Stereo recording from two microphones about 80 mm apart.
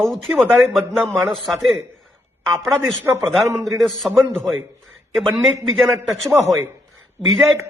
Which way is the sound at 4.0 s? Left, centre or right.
Centre.